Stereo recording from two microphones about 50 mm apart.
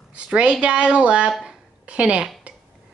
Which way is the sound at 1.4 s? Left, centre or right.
Right.